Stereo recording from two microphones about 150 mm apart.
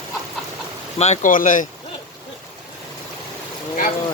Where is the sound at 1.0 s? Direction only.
55° left (ahead or behind).